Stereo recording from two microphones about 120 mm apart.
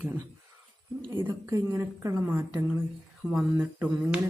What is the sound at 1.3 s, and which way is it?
A woman's voice, 30° right (ahead or behind).